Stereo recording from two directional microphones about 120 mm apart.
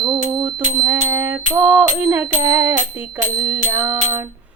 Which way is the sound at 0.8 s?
25° right (ahead or behind).